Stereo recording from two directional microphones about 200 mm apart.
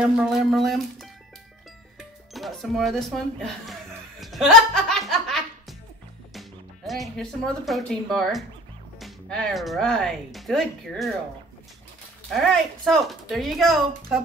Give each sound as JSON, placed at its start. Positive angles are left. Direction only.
{"t": 0.0, "sound": "speech", "side_deg": 0}
{"t": 4.2, "sound": "music", "side_deg": 0}
{"t": 6.9, "sound": "speech", "side_deg": 0}
{"t": 12.3, "sound": "speech", "side_deg": 0}